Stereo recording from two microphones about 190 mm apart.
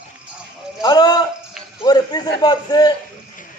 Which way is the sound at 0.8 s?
20° left (ahead or behind).